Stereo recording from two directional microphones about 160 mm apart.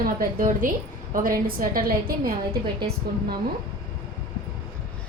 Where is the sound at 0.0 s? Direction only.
60° right (ahead or behind).